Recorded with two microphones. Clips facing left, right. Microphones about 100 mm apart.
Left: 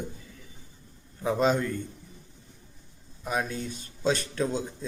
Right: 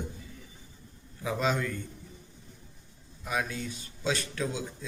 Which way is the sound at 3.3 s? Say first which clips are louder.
Left 2 dB; 35° left (ahead or behind).